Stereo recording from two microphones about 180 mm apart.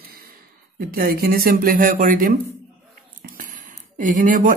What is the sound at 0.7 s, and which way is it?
Speech, 55° right (ahead or behind).